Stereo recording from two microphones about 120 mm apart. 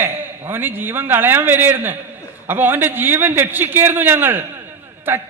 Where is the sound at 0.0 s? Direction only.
20° right (ahead or behind).